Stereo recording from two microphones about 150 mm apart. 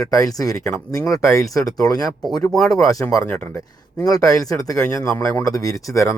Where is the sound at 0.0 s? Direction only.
25° left (ahead or behind).